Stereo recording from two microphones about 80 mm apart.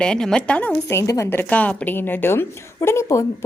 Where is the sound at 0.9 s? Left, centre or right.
Left.